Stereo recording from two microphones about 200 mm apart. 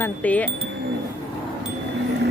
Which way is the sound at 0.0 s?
5° left (ahead or behind).